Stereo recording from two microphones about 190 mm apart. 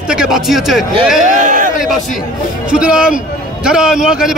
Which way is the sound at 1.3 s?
40° right (ahead or behind).